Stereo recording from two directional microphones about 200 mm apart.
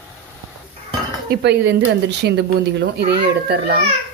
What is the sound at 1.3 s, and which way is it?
Speech, 55° right (ahead or behind).